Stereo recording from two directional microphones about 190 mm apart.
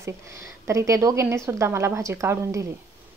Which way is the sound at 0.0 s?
15° right (ahead or behind).